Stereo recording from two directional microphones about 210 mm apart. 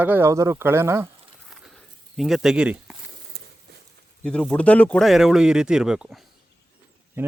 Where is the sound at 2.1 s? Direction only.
Centre (ahead or behind).